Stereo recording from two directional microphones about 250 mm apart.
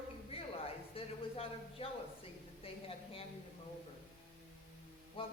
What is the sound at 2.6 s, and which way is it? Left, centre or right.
Speech, left.